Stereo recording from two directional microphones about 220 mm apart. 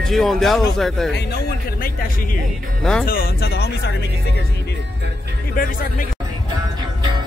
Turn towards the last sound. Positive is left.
turn(degrees=40)  # may be behind; listen again after turning